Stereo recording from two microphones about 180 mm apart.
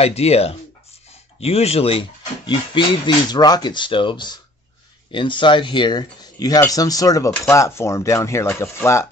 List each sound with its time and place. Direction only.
0.0 s speech: 35° left (ahead or behind); by 9.0 s 15° left (ahead or behind)